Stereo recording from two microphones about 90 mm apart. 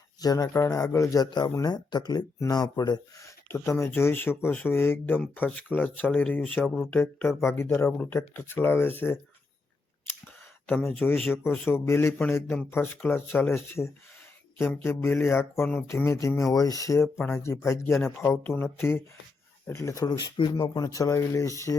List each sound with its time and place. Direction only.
0.2 s speech: 45° left (ahead or behind)
1.3 s speech: 55° left (ahead or behind)
3.2 s speech: 30° left (ahead or behind)
7.8 s speech: 15° left (ahead or behind)
10.8 s speech: 20° left (ahead or behind)
20.1 s speech: 55° left (ahead or behind)
20.5 s speech: 45° left (ahead or behind)